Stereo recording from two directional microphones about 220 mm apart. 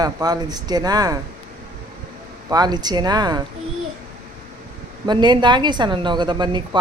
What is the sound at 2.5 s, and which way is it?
Speech, 20° right (ahead or behind).